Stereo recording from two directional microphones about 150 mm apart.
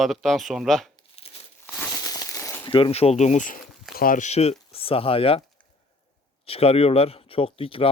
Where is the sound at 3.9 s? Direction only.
70° left (ahead or behind); by 5.4 s 40° left (ahead or behind).